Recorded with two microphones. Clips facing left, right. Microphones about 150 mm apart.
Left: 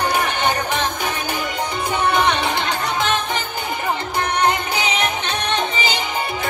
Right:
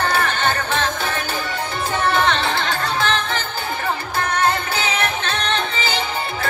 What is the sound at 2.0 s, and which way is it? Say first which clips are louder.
Music: even; 15° left (ahead or behind).